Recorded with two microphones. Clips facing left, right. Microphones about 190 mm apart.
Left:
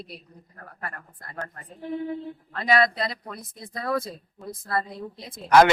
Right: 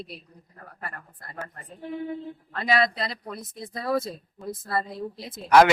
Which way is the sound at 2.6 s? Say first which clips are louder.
Left 2 dB; centre (ahead or behind).